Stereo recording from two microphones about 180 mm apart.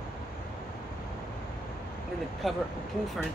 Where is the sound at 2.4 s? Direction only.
Centre (ahead or behind).